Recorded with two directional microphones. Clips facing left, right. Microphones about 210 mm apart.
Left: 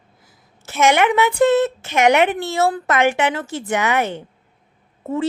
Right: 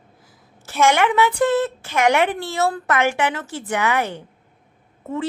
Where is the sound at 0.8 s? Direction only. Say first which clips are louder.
Left 1 dB; 20° left (ahead or behind).